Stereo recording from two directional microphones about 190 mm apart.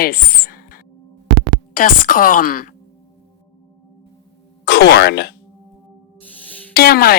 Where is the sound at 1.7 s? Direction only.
45° left (ahead or behind).